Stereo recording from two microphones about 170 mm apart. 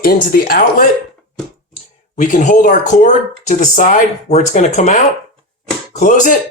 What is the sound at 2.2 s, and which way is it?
Speech, 50° left (ahead or behind).